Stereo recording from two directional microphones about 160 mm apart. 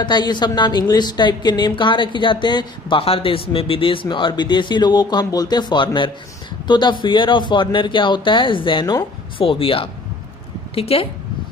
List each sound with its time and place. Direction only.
0.0 s a woman's voice: 25° left (ahead or behind)